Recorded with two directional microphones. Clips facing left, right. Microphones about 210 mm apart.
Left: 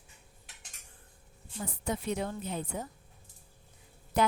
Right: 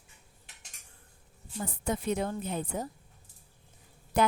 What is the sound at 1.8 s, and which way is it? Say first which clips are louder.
A woman's voice: right 3 dB; 50° right (ahead or behind).